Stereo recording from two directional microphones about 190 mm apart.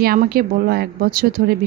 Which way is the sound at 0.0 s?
50° right (ahead or behind).